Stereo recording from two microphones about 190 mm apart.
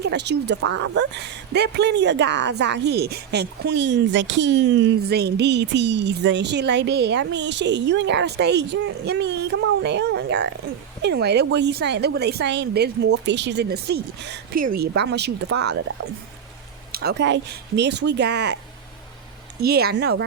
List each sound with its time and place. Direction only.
0.0 s a woman's voice: 65° right (ahead or behind)
16.9 s a woman's voice: 55° right (ahead or behind)
19.6 s a woman's voice: 55° right (ahead or behind)